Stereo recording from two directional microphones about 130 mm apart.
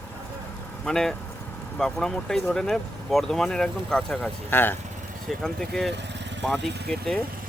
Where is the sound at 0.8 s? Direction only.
5° left (ahead or behind).